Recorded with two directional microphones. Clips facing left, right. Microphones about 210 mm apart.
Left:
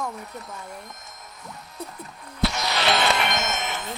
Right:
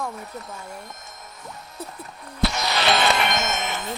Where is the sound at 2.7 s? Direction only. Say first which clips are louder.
Right 2 dB; 40° right (ahead or behind).